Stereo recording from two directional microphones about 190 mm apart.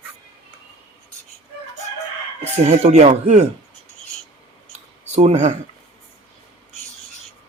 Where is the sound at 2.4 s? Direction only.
35° right (ahead or behind).